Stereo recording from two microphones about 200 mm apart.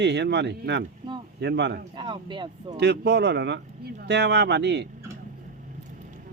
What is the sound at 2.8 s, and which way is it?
Speech, 60° right (ahead or behind).